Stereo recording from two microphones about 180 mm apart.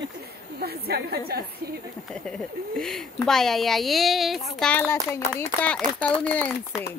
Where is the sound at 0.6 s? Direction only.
60° right (ahead or behind).